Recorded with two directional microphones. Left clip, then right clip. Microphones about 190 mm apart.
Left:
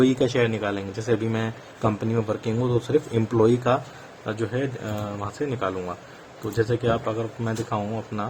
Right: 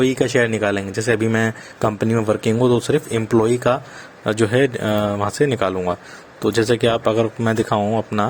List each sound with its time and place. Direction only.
0.0 s a man's voice: 15° right (ahead or behind)